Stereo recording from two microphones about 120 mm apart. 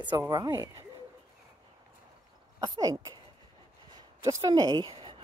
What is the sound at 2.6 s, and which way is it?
Speech, 35° right (ahead or behind).